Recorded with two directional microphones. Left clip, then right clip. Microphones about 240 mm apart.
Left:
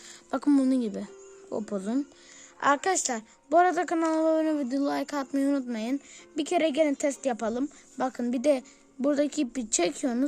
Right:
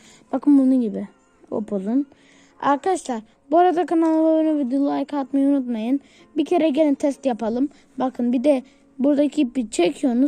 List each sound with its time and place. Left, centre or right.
0.3 s a woman's voice: centre